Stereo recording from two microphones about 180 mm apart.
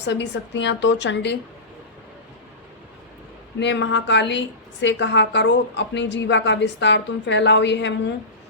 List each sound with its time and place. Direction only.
0.0 s a woman's voice: 75° left (ahead or behind)
3.6 s a woman's voice: 75° left (ahead or behind)